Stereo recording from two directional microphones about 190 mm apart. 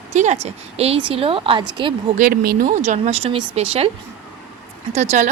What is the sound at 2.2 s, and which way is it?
Speech, 50° right (ahead or behind).